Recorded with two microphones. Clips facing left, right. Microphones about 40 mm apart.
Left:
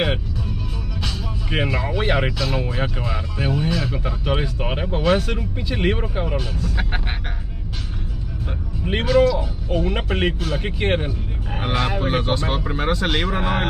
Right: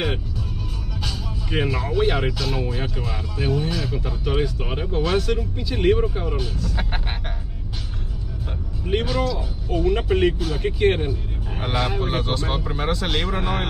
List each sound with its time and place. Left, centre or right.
1.0 s speech: centre
2.3 s speech: centre
2.6 s speech: centre
3.9 s speech: left
9.1 s speech: centre
9.7 s speech: left